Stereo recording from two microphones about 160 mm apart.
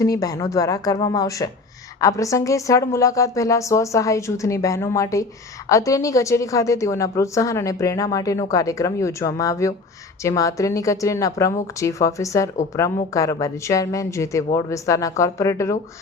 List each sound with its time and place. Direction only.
0.0 s a woman's voice: 20° left (ahead or behind)